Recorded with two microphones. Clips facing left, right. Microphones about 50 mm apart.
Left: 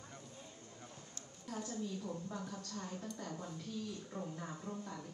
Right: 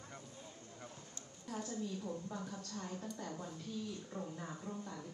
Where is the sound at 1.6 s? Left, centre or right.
Right.